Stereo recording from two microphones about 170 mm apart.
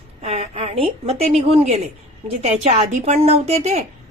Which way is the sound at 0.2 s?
35° right (ahead or behind).